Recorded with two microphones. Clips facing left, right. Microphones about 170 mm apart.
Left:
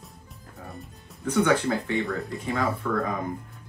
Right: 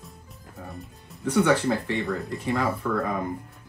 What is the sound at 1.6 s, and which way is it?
Speech, centre (ahead or behind).